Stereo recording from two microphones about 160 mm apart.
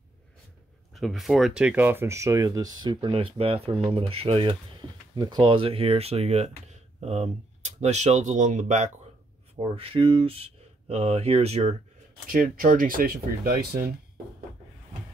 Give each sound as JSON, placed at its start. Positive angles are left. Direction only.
{"t": 0.9, "sound": "speech", "side_deg": 0}
{"t": 9.6, "sound": "speech", "side_deg": -35}
{"t": 12.3, "sound": "speech", "side_deg": -60}